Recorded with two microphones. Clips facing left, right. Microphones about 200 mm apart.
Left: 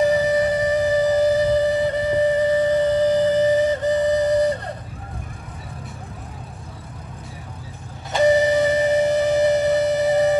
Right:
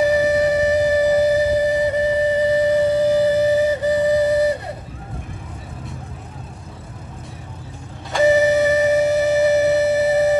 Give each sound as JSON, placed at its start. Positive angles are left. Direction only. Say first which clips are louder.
{"t": 0.0, "sound": "music", "louder": "right 2 dB", "side_deg": -10}
{"t": 8.2, "sound": "music", "louder": "right 2 dB", "side_deg": -5}